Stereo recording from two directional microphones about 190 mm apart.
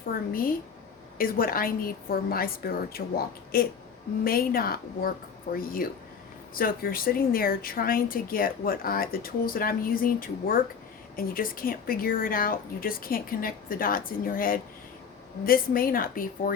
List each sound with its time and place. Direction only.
1.2 s speech: 50° left (ahead or behind)